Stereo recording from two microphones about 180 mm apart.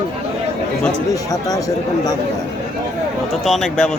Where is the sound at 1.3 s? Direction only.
20° left (ahead or behind).